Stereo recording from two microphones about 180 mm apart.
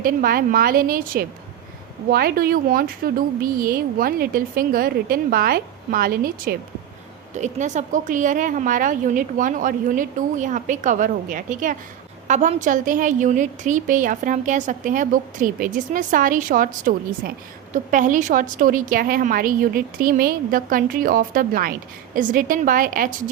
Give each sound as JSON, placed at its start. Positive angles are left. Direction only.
{"t": 0.0, "sound": "a woman's voice", "side_deg": -50}
{"t": 7.3, "sound": "a woman's voice", "side_deg": -40}